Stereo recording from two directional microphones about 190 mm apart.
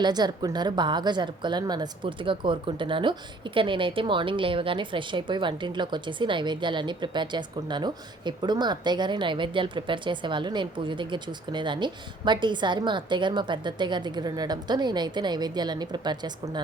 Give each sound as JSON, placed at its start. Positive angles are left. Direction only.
{"t": 0.0, "sound": "a woman's voice", "side_deg": -20}